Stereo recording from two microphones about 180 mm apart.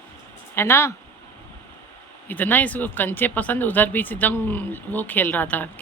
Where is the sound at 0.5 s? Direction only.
15° left (ahead or behind).